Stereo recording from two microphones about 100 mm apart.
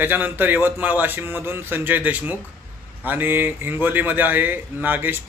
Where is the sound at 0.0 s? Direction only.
20° right (ahead or behind).